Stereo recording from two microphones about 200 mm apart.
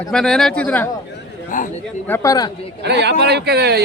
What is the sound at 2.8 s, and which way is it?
A man's voice, 60° right (ahead or behind).